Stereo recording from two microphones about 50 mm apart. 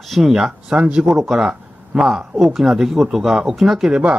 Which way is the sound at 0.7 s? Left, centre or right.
Right.